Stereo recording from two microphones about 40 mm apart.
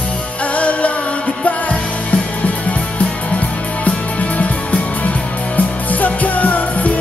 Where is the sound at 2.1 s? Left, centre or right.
Left.